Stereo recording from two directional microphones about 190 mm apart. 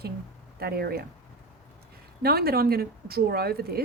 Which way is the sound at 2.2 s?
55° right (ahead or behind).